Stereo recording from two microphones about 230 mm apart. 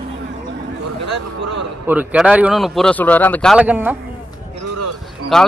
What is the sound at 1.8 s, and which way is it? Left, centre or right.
Speech, centre.